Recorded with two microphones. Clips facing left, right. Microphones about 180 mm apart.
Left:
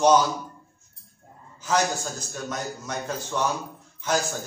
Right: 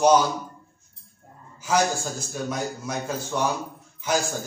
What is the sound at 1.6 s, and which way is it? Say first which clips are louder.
A man's voice: right 2 dB; 10° right (ahead or behind).